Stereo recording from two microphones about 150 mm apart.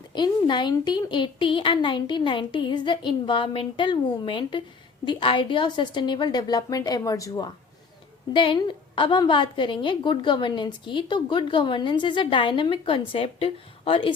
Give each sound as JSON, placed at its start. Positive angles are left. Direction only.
{"t": 0.1, "sound": "a woman's voice", "side_deg": 30}